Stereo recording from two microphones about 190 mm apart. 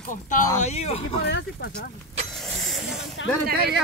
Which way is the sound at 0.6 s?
35° left (ahead or behind).